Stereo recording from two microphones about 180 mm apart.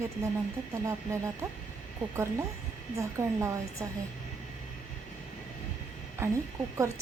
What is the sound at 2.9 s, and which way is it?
Speech, 15° right (ahead or behind).